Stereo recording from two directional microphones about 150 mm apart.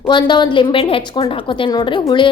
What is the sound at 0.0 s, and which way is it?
A woman's voice, 30° left (ahead or behind).